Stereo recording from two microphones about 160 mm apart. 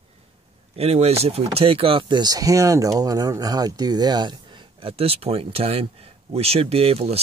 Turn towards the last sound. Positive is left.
turn(degrees=-40)  # may be behind; listen again after turning